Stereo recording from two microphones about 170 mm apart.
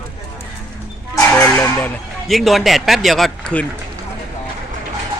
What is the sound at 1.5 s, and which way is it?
Speech, 10° left (ahead or behind).